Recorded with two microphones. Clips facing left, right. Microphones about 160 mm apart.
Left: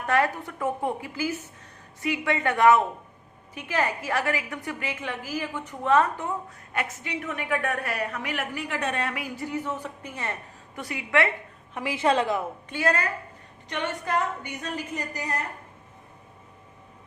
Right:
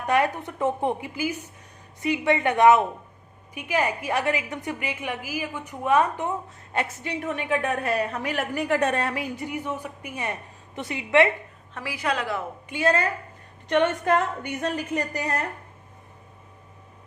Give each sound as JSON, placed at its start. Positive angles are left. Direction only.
{"t": 0.0, "sound": "a woman's voice", "side_deg": -15}
{"t": 6.7, "sound": "a woman's voice", "side_deg": -35}
{"t": 9.2, "sound": "a woman's voice", "side_deg": -20}
{"t": 11.7, "sound": "a woman's voice", "side_deg": 20}
{"t": 12.6, "sound": "a woman's voice", "side_deg": -15}
{"t": 13.7, "sound": "a woman's voice", "side_deg": -60}